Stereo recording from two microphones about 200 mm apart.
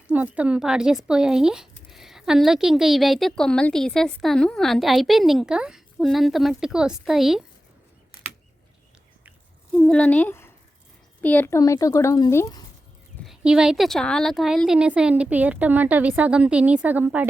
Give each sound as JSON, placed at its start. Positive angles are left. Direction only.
{"t": 0.1, "sound": "speech", "side_deg": -5}
{"t": 9.7, "sound": "a woman's voice", "side_deg": 5}
{"t": 13.2, "sound": "speech", "side_deg": -5}